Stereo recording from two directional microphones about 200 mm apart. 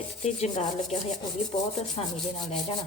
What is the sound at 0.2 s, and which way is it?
Rub, 35° left (ahead or behind).